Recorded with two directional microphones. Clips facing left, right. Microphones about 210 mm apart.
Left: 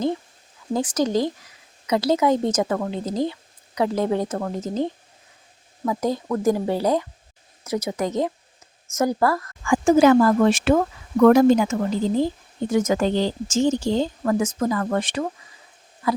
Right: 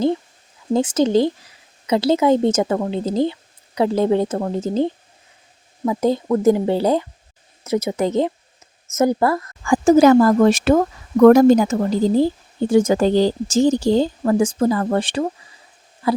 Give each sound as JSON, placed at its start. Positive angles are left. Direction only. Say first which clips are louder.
{"t": 0.7, "sound": "a woman's voice", "louder": "right 5 dB", "side_deg": -25}
{"t": 9.6, "sound": "speech", "louder": "right 3 dB", "side_deg": -35}